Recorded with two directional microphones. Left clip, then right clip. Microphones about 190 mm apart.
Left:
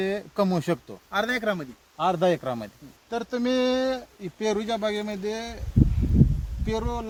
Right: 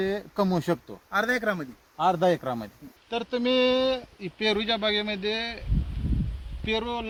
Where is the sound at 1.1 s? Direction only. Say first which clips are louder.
Even; 5° right (ahead or behind).